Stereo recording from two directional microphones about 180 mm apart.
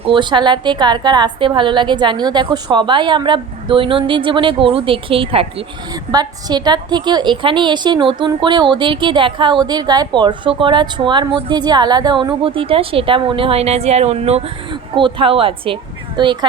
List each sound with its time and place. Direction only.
0.0 s a woman's voice: 25° right (ahead or behind)